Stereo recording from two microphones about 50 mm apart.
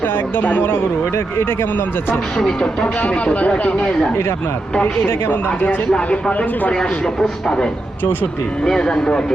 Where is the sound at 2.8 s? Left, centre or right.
Left.